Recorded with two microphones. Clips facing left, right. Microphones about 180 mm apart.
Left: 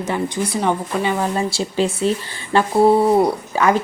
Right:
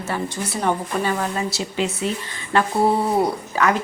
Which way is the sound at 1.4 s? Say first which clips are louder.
Left 4 dB; 30° left (ahead or behind).